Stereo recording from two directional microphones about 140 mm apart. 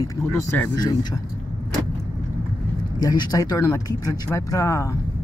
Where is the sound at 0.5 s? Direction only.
10° left (ahead or behind).